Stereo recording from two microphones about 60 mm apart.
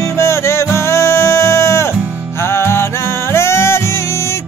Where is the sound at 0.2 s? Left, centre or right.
Left.